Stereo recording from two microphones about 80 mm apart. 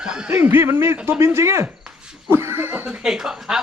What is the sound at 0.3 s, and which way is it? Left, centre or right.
Speech, right.